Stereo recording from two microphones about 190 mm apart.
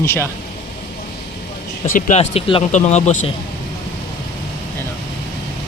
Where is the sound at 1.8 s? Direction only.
40° left (ahead or behind).